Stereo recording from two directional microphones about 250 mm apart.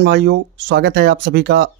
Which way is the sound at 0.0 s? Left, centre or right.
Right.